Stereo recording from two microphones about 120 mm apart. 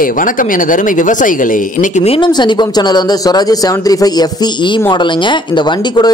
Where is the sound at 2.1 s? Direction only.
40° left (ahead or behind).